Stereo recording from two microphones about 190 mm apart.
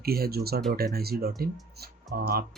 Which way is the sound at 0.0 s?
55° right (ahead or behind).